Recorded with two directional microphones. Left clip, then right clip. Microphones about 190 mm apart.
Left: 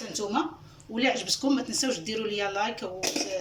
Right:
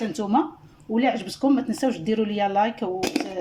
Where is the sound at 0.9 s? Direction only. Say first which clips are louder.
Right 3 dB; 35° right (ahead or behind).